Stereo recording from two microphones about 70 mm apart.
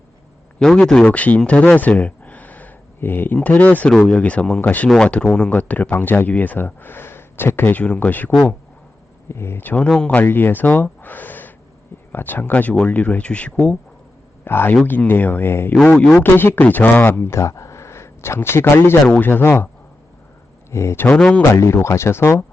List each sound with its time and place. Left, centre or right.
0.6 s speech: centre
1.0 s speech: centre
1.5 s a sound: left
3.3 s speech: centre
9.3 s speech: left
9.6 s speech: centre
10.2 s speech: left
11.0 s gasp: left
12.1 s speech: left
14.4 s speech: left
20.7 s speech: left
21.2 s speech: centre
21.5 s speech: left